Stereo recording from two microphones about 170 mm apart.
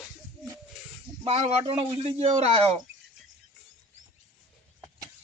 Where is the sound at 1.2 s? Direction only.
35° right (ahead or behind).